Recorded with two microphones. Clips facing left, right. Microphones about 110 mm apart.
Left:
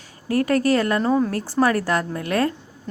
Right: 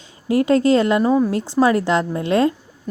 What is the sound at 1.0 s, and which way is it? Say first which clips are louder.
Speech: right 3 dB; 5° right (ahead or behind).